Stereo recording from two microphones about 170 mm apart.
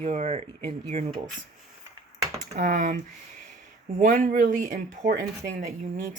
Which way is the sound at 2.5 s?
50° right (ahead or behind).